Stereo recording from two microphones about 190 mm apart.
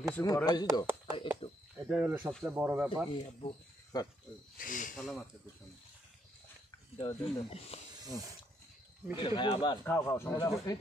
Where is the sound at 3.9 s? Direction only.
20° left (ahead or behind).